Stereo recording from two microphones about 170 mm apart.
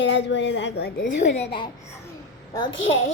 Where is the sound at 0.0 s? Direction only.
90° left.